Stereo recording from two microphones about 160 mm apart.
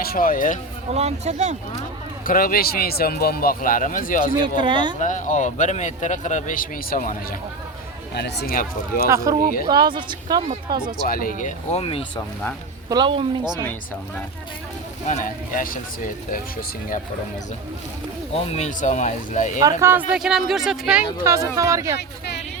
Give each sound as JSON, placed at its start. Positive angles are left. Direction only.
{"t": 0.0, "sound": "speech", "side_deg": 65}
{"t": 0.9, "sound": "speech", "side_deg": -45}
{"t": 2.2, "sound": "speech", "side_deg": 60}
{"t": 4.6, "sound": "speech", "side_deg": -30}
{"t": 4.9, "sound": "a man's voice", "side_deg": 50}
{"t": 8.1, "sound": "speech", "side_deg": 90}
{"t": 9.0, "sound": "speech", "side_deg": -20}
{"t": 11.0, "sound": "speech", "side_deg": 65}
{"t": 11.8, "sound": "speech", "side_deg": 35}
{"t": 12.9, "sound": "speech", "side_deg": -30}
{"t": 15.0, "sound": "speech", "side_deg": 50}
{"t": 18.5, "sound": "a man's voice", "side_deg": 50}
{"t": 19.8, "sound": "speech", "side_deg": -10}
{"t": 21.2, "sound": "speech", "side_deg": -20}